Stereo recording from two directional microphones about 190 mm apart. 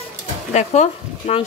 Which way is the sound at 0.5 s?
35° left (ahead or behind).